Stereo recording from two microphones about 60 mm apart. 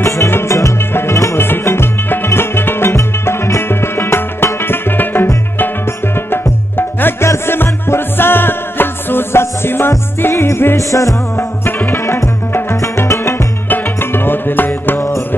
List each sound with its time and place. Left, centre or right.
0.5 s music: left
0.9 s music: left
10.8 s music: left
11.6 s music: left
12.9 s music: left
13.7 s music: left